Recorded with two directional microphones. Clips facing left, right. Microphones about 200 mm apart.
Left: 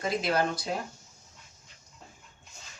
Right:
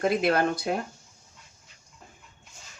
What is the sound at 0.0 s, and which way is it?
Speech, 60° right (ahead or behind).